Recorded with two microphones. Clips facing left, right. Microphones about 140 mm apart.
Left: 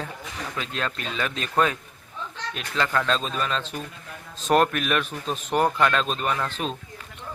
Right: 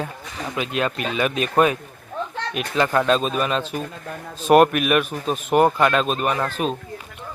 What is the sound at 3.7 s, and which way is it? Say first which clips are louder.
Speech: right 6 dB; 50° right (ahead or behind).